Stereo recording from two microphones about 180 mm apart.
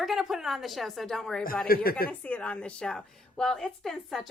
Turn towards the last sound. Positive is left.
turn(degrees=0)  # may be behind; listen again after turning